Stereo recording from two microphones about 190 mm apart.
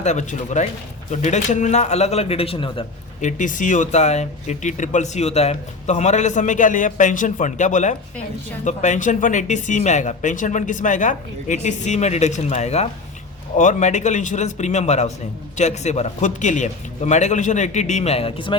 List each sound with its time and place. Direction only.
0.0 s speech: 40° left (ahead or behind)
3.2 s speech: 40° left (ahead or behind)